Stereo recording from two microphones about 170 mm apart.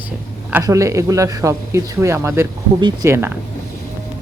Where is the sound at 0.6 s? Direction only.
20° right (ahead or behind).